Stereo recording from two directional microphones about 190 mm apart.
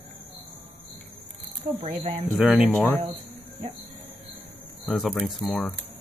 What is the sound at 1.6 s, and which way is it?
Speech, 30° right (ahead or behind).